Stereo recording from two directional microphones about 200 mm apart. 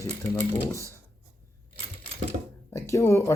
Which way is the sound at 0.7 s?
15° right (ahead or behind).